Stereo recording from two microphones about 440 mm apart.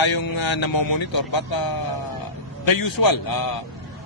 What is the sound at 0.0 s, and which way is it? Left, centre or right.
Music, left.